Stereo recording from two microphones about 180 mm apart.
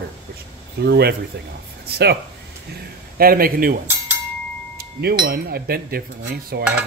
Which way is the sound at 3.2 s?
55° right (ahead or behind).